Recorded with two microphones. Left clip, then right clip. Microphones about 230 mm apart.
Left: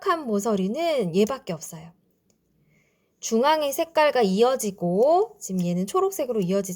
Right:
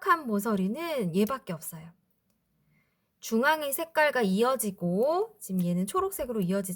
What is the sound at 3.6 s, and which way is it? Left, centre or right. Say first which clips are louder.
Speech: left 5 dB; centre.